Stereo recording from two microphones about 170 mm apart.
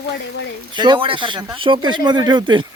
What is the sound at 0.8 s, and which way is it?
Speech, 30° right (ahead or behind).